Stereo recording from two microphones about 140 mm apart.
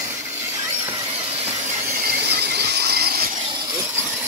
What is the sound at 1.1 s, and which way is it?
Squeal, 50° right (ahead or behind).